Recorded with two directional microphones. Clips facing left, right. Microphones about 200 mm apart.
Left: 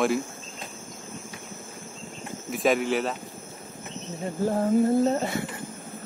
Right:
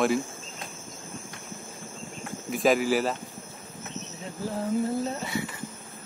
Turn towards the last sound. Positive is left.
turn(degrees=55)  # may be behind; listen again after turning